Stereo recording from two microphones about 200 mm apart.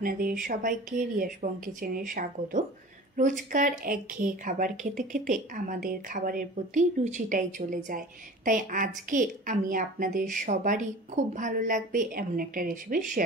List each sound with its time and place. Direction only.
0.0 s a woman's voice: 45° right (ahead or behind)